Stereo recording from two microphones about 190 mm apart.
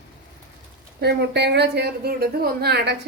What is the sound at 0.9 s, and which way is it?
A woman's voice, 60° right (ahead or behind).